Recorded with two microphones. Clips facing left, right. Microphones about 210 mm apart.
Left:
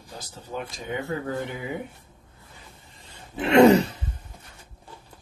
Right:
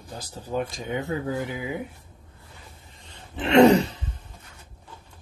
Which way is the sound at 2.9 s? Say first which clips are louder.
Left 3 dB; 5° left (ahead or behind).